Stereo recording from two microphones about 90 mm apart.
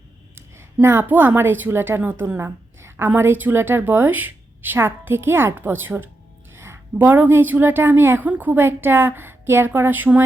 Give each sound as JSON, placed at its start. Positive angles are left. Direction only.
{"t": 0.3, "sound": "a woman's voice", "side_deg": -30}